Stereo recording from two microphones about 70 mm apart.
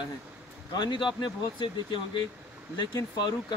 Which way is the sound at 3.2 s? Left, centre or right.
Left.